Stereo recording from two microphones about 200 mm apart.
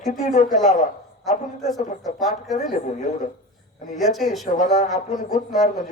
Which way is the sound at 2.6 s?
40° left (ahead or behind).